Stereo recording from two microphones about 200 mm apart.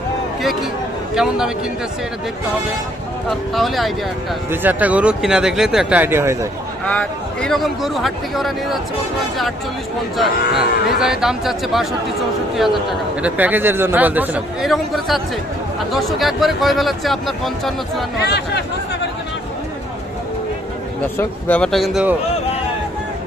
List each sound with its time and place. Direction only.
1.1 s speech: 5° right (ahead or behind)
3.2 s speech: centre (ahead or behind)
6.8 s speech: 5° left (ahead or behind)
10.2 s speech: centre (ahead or behind)
13.2 s speech: 10° right (ahead or behind)
18.2 s speech: 55° left (ahead or behind)
21.2 s speech: 10° left (ahead or behind)